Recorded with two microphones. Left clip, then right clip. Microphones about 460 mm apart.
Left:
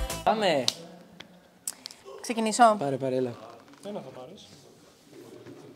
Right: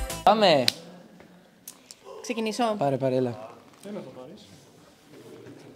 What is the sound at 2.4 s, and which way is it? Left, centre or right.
Speech, centre.